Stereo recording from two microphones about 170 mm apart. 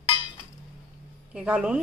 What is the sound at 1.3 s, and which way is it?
Speech, 5° right (ahead or behind).